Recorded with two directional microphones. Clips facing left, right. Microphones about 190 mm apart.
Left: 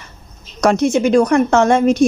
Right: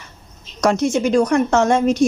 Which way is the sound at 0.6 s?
60° left (ahead or behind).